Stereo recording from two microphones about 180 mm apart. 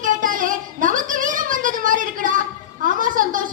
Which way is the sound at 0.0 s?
45° right (ahead or behind).